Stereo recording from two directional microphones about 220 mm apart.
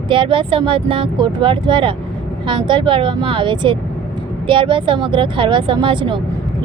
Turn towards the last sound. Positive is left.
turn(degrees=-20)  # may be behind; listen again after turning